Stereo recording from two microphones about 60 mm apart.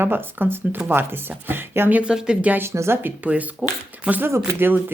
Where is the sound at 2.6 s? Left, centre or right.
Right.